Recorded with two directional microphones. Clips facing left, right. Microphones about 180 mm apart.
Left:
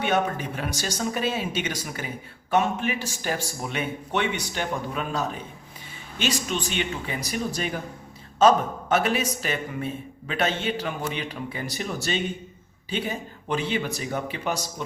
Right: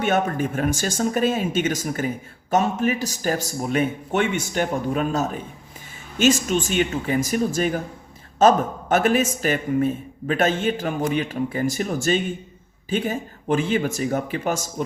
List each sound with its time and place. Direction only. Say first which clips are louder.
0.0 s a man's voice: right 3 dB; 50° right (ahead or behind)